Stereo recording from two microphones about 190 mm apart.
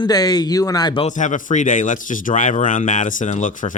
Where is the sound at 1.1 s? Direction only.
40° left (ahead or behind).